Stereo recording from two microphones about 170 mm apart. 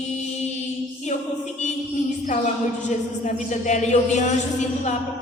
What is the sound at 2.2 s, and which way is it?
Speech, 50° left (ahead or behind).